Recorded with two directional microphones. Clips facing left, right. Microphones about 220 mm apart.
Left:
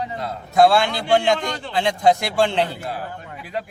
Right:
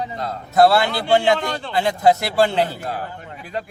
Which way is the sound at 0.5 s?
5° right (ahead or behind).